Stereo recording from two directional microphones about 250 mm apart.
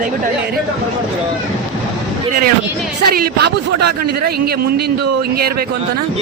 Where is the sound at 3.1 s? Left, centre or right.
Right.